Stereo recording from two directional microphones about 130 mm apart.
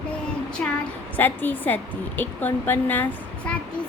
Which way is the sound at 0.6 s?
10° left (ahead or behind).